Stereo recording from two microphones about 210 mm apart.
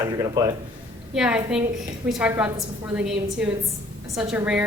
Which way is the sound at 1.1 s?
5° right (ahead or behind).